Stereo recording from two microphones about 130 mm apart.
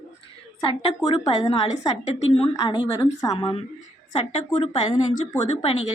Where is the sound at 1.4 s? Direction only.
55° left (ahead or behind).